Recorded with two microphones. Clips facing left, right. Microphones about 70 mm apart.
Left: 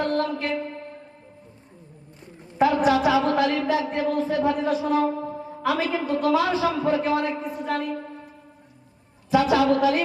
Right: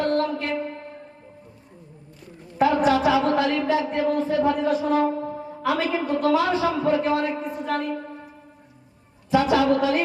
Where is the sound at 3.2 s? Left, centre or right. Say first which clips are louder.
Even; right.